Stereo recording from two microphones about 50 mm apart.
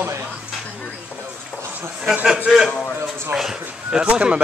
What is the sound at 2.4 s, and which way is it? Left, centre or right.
Speech, centre.